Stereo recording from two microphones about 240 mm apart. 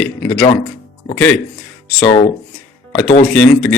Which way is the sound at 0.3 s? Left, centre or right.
Centre.